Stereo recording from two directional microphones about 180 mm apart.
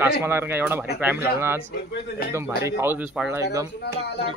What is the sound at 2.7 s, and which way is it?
A man's voice, 15° right (ahead or behind).